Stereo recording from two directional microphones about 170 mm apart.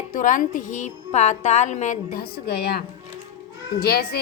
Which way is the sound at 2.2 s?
70° left (ahead or behind).